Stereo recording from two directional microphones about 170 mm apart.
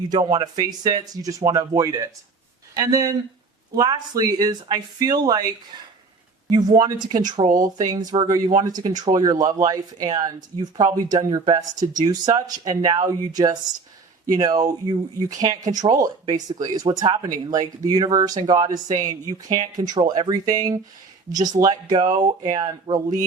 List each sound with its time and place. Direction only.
0.1 s speech: 25° right (ahead or behind)
6.5 s speech: 25° right (ahead or behind)